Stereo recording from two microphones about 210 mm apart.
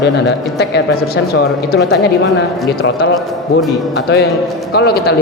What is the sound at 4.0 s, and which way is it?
Speech, 55° left (ahead or behind).